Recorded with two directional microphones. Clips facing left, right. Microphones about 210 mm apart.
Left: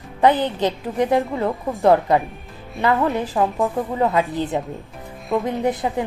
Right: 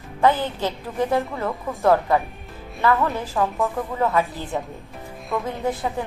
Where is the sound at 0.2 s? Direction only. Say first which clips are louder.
Left 3 dB; 20° left (ahead or behind).